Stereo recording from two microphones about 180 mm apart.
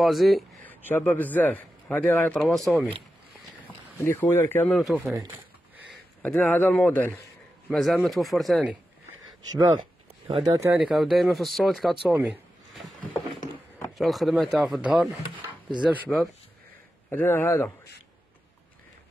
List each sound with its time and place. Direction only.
0.0 s a man's voice: centre (ahead or behind)
4.0 s a man's voice: 15° left (ahead or behind)
4.7 s speech: centre (ahead or behind)
5.1 s speech: 15° right (ahead or behind)
5.9 s speech: 10° left (ahead or behind)
10.2 s speech: 25° right (ahead or behind)
10.7 s speech: 5° right (ahead or behind)
13.9 s speech: centre (ahead or behind)
17.1 s a man's voice: 10° left (ahead or behind)